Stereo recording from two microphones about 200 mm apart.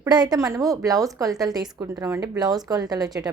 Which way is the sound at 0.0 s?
20° right (ahead or behind).